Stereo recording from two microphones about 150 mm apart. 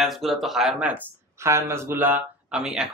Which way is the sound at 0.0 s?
Centre (ahead or behind).